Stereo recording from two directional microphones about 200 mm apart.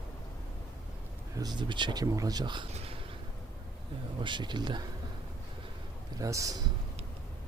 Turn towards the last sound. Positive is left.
turn(degrees=-15)  # may be behind; listen again after turning